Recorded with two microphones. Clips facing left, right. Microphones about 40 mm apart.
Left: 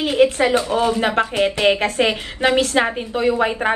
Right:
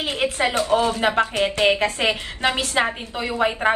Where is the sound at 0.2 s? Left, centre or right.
Centre.